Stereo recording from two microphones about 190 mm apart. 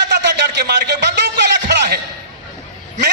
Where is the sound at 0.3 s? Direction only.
60° right (ahead or behind).